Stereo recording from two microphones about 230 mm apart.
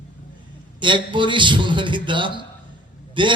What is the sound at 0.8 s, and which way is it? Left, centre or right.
Speech, right.